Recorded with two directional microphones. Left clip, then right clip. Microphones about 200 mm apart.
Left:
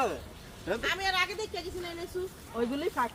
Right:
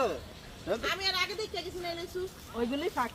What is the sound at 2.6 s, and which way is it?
Speech, 20° right (ahead or behind).